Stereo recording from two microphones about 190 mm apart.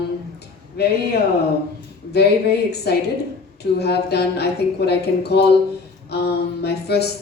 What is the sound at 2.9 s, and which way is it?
Speech, 60° left (ahead or behind).